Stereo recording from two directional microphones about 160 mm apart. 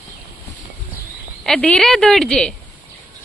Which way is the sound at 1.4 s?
5° left (ahead or behind).